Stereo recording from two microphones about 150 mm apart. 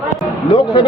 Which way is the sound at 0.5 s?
35° left (ahead or behind).